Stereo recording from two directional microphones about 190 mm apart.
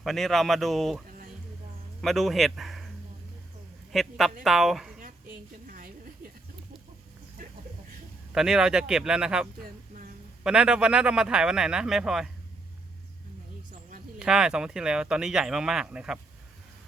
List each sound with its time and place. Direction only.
0.0 s speech: centre (ahead or behind)
3.9 s speech: centre (ahead or behind)
5.6 s a sound: 45° right (ahead or behind)
8.3 s speech: 5° right (ahead or behind)
9.6 s a sound: 45° right (ahead or behind)
10.4 s speech: 5° right (ahead or behind)
14.2 s speech: 5° right (ahead or behind)